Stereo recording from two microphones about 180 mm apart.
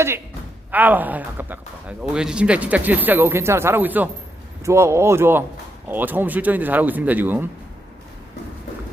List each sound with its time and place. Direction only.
0.7 s speech: 10° right (ahead or behind)